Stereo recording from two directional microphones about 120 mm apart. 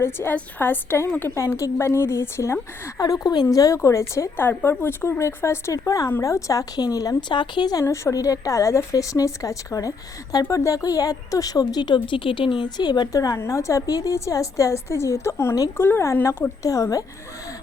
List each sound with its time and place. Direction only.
0.0 s a woman's voice: 20° left (ahead or behind)